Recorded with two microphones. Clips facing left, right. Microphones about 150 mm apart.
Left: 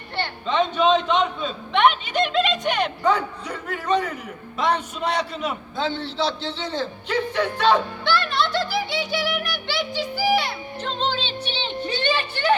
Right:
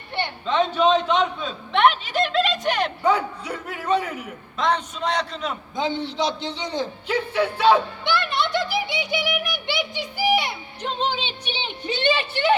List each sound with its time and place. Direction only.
0.4 s a man's voice: centre (ahead or behind)
4.5 s a man's voice: 10° left (ahead or behind)
5.7 s a man's voice: 15° right (ahead or behind)
8.0 s music: 20° right (ahead or behind)
11.9 s a woman's voice: 25° right (ahead or behind)